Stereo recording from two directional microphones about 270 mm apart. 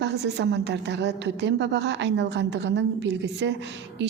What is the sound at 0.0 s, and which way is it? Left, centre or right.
A woman's voice, right.